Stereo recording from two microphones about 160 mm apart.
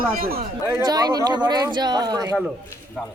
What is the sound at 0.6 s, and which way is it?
Speech, 20° right (ahead or behind).